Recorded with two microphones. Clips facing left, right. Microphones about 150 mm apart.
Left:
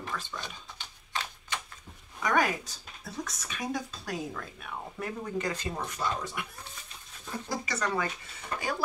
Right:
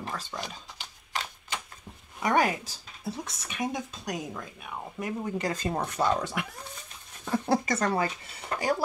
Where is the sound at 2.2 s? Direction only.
30° right (ahead or behind); by 5.1 s 10° right (ahead or behind).